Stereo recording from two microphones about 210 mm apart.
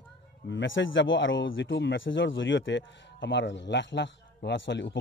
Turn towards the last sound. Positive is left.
turn(degrees=60)  # may be behind; listen again after turning